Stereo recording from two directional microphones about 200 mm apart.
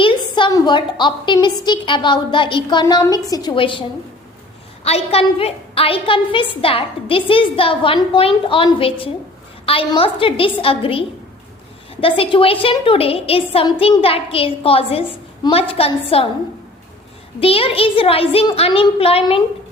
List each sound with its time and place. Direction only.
0.0 s a woman's voice: 25° left (ahead or behind)
17.4 s a woman's voice: 30° left (ahead or behind)